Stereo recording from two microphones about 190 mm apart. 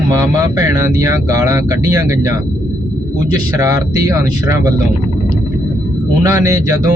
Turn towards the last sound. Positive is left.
turn(degrees=-15)  # may be behind; listen again after turning